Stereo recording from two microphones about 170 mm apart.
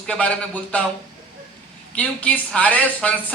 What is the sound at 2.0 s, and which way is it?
A man's voice, 10° left (ahead or behind).